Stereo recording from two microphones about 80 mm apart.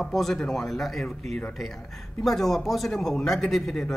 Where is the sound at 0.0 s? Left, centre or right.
Centre.